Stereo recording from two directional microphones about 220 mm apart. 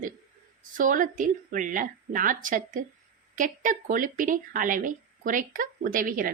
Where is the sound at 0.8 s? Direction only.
35° right (ahead or behind).